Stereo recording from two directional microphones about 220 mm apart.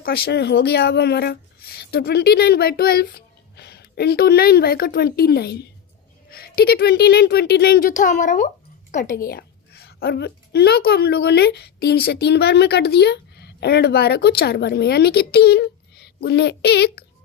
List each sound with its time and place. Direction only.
0.0 s a child's voice: 45° left (ahead or behind)